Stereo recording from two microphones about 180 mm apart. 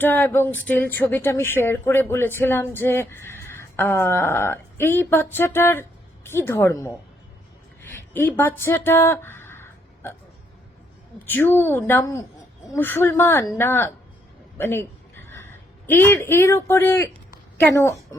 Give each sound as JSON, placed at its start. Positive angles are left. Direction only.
{"t": 0.0, "sound": "speech", "side_deg": 10}
{"t": 7.8, "sound": "a sound", "side_deg": 10}
{"t": 11.3, "sound": "a man's voice", "side_deg": 10}